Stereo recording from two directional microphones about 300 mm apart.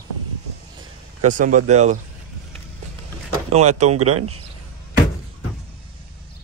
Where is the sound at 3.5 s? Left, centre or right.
Right.